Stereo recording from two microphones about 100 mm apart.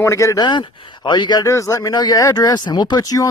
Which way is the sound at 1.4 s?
30° left (ahead or behind).